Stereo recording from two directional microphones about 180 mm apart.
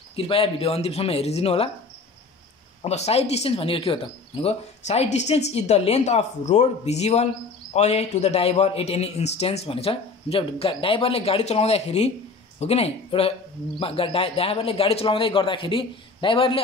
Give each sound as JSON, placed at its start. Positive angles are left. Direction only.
{"t": 0.1, "sound": "speech", "side_deg": 30}
{"t": 2.8, "sound": "speech", "side_deg": 35}